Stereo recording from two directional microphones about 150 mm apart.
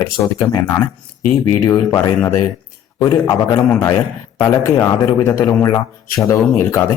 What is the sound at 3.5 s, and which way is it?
Speech, 10° left (ahead or behind).